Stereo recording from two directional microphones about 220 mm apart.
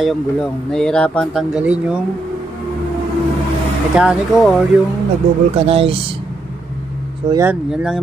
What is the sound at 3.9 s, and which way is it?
Speech, centre (ahead or behind).